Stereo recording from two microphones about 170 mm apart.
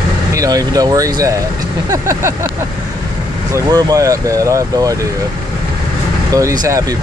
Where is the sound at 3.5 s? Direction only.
20° right (ahead or behind).